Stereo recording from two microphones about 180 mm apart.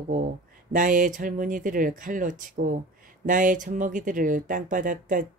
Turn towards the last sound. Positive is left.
turn(degrees=-45)  # may be behind; listen again after turning